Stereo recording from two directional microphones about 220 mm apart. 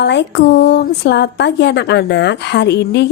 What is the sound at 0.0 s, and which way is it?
A woman's voice, 50° left (ahead or behind).